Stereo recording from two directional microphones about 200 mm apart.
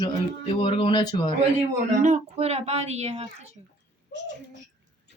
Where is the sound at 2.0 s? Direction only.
35° right (ahead or behind).